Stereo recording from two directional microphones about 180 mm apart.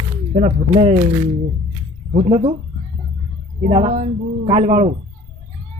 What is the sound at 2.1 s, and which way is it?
Speech, 40° right (ahead or behind).